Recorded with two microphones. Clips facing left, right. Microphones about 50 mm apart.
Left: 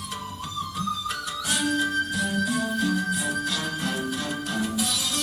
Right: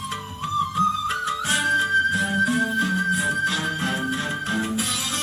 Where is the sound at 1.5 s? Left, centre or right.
Right.